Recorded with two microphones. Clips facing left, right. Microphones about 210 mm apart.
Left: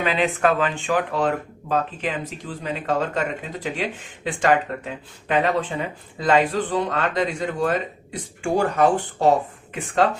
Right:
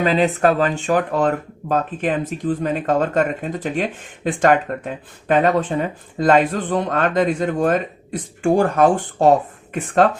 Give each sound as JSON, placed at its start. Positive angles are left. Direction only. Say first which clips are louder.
{"t": 0.0, "sound": "speech", "louder": "right 4 dB", "side_deg": -40}